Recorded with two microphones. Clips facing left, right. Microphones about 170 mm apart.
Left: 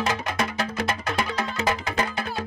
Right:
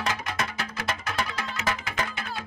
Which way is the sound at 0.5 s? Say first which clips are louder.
Left 6 dB; 35° left (ahead or behind).